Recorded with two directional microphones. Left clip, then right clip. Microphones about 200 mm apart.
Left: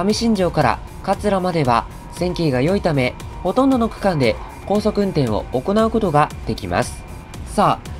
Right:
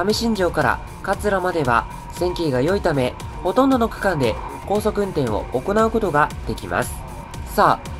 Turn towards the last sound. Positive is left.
turn(degrees=15)  # may be behind; listen again after turning